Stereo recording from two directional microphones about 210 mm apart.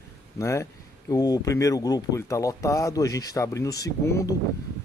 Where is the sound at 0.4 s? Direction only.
15° left (ahead or behind).